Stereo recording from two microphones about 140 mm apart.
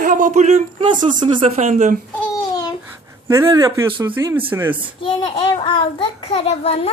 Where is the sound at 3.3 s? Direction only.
20° right (ahead or behind).